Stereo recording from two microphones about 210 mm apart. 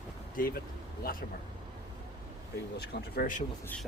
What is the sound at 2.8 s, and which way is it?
Speech, 45° left (ahead or behind).